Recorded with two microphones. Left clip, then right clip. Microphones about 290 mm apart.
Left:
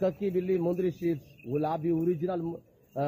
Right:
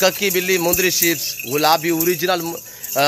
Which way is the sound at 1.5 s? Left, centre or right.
Centre.